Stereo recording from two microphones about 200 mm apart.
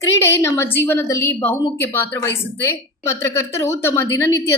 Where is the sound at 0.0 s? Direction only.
15° left (ahead or behind).